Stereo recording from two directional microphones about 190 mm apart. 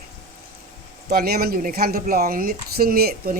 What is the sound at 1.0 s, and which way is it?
Speech, 55° right (ahead or behind).